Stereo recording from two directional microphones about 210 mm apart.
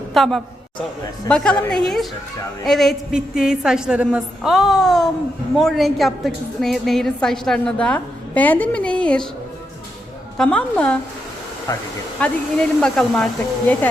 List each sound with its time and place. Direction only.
0.1 s a man's voice: centre (ahead or behind)
10.3 s a woman's voice: 5° left (ahead or behind)
11.7 s speech: 15° left (ahead or behind)
12.2 s a woman's voice: 5° left (ahead or behind)